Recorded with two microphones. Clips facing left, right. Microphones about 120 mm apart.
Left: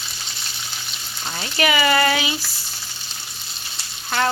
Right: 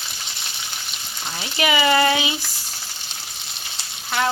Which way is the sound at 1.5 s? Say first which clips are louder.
Even; 20° right (ahead or behind).